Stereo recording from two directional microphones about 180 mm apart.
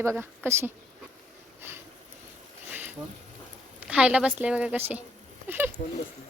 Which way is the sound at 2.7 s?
10° right (ahead or behind).